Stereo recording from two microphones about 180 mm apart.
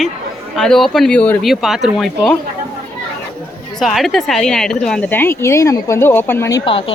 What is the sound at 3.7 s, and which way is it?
A woman's voice, centre (ahead or behind).